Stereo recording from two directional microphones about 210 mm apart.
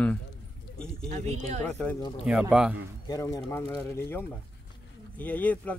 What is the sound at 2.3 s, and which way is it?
Speech, 5° right (ahead or behind).